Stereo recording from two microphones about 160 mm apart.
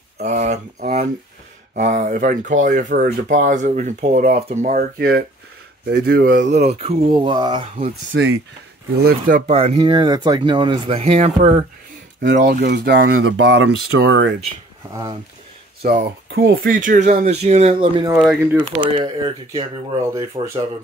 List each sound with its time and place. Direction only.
0.2 s speech: 45° right (ahead or behind); by 6.6 s 60° right (ahead or behind)
6.6 s speech: 40° right (ahead or behind)
8.1 s speech: 90° right
8.9 s speech: 75° right (ahead or behind)
9.5 s speech: 40° right (ahead or behind)
12.2 s speech: 75° right (ahead or behind); by 14.2 s 90° right
14.9 s speech: 20° right (ahead or behind)
15.8 s speech: 70° right (ahead or behind); by 17.7 s 45° right (ahead or behind)
17.7 s speech: 30° right (ahead or behind)
18.1 s speech: 10° right (ahead or behind)
18.6 s speech: 30° right (ahead or behind)
20.1 s speech: 20° right (ahead or behind)